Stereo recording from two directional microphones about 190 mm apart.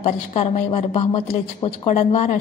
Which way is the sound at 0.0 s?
35° left (ahead or behind).